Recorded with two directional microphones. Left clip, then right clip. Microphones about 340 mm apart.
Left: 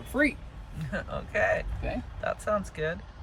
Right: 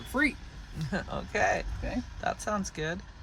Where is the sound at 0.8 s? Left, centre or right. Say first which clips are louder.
Even; centre.